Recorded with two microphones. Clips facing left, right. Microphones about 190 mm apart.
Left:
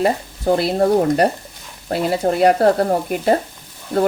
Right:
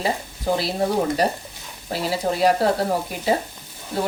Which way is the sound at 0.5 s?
55° left (ahead or behind).